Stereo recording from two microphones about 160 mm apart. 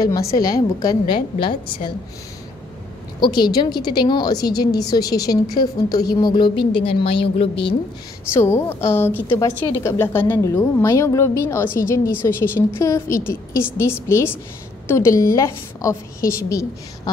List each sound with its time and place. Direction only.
0.0 s a woman's voice: 25° left (ahead or behind)
3.2 s a woman's voice: 25° left (ahead or behind)
8.3 s a woman's voice: 15° left (ahead or behind)